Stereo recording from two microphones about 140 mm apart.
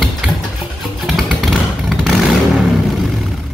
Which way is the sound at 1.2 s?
Centre (ahead or behind).